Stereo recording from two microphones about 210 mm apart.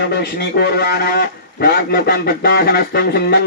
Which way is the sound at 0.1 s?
50° left (ahead or behind).